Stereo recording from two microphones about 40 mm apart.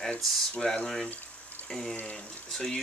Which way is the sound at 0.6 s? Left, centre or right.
Centre.